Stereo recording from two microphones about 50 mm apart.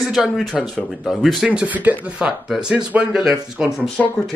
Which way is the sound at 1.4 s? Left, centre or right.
Right.